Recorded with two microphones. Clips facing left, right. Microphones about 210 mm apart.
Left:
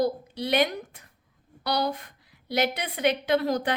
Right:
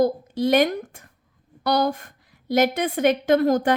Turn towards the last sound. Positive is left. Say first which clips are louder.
# right 6 dB
turn(degrees=-50)  # may be behind; listen again after turning